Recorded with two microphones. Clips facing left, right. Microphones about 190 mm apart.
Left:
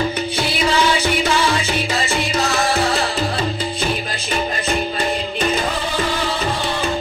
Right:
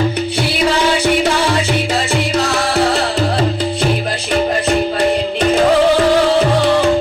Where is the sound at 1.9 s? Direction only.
70° right (ahead or behind).